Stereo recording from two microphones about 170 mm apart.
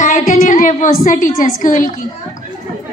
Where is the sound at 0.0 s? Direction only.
50° left (ahead or behind).